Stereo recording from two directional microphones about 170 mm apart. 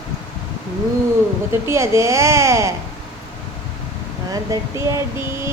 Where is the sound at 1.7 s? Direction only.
15° right (ahead or behind).